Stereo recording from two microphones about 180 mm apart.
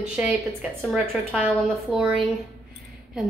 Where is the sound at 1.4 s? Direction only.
5° right (ahead or behind).